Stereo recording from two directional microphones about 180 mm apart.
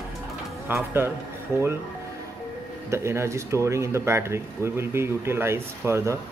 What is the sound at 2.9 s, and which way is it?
Speech, 15° right (ahead or behind).